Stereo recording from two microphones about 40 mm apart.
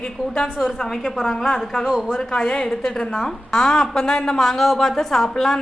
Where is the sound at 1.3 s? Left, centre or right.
Centre.